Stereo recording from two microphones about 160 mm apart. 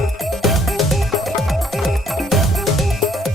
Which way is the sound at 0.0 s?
Centre (ahead or behind).